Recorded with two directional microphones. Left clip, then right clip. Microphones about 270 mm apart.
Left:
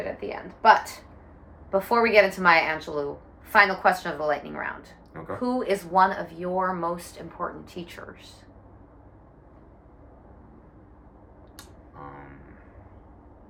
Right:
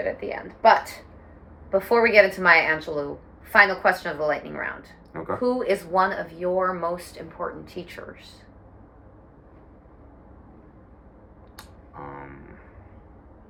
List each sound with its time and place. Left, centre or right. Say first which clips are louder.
0.0 s speech: right 4 dB; centre
1.7 s speech: right 2 dB; centre
11.5 s a sound: right 4 dB; centre